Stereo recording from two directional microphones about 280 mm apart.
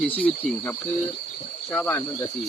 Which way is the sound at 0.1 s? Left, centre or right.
Centre.